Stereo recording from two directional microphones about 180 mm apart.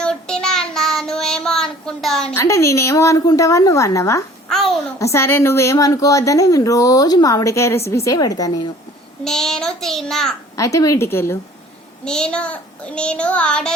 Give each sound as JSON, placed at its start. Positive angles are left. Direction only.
{"t": 0.0, "sound": "child singing", "side_deg": 5}
{"t": 2.3, "sound": "a woman's voice", "side_deg": 15}
{"t": 4.4, "sound": "babbling", "side_deg": 0}
{"t": 4.8, "sound": "a woman's voice", "side_deg": 15}
{"t": 9.2, "sound": "child singing", "side_deg": 0}
{"t": 10.6, "sound": "a woman's voice", "side_deg": 20}
{"t": 12.0, "sound": "child singing", "side_deg": 5}